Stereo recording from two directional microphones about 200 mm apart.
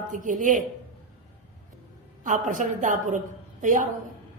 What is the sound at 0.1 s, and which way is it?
Speech, 40° right (ahead or behind).